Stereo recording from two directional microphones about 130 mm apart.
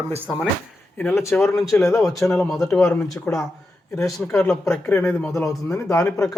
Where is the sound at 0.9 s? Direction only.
15° left (ahead or behind).